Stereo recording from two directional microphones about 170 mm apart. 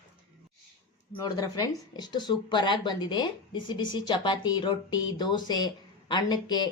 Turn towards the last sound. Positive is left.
turn(degrees=25)  # may be behind; listen again after turning